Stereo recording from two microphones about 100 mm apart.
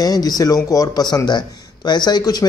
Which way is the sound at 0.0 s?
40° left (ahead or behind).